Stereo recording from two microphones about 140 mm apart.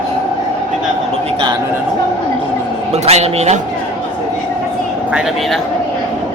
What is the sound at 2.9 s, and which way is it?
Speech, 50° right (ahead or behind).